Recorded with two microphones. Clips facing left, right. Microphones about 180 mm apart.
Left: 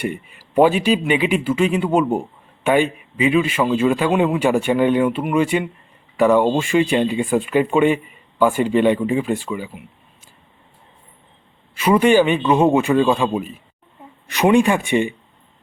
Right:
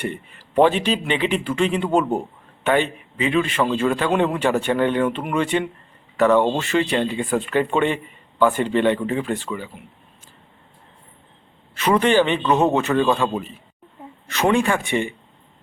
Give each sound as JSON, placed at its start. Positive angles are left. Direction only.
{"t": 0.0, "sound": "a man's voice", "side_deg": 10}
{"t": 11.7, "sound": "a man's voice", "side_deg": 10}